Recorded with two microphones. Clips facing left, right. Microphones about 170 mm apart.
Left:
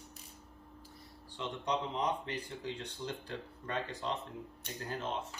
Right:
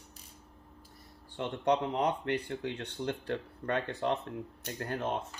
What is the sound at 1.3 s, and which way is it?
Speech, 55° right (ahead or behind).